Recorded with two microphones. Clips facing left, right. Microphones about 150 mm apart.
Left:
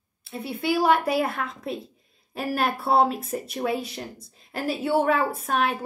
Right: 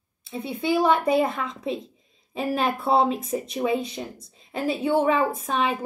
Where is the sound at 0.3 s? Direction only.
5° left (ahead or behind).